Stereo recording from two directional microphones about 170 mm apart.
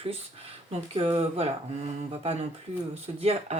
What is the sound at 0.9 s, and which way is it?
Speech, 35° right (ahead or behind).